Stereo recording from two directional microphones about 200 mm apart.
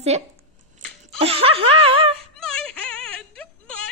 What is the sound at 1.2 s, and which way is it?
Speech, 30° right (ahead or behind).